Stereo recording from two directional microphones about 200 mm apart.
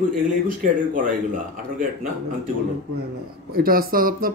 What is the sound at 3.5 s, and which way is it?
Speech, 45° right (ahead or behind).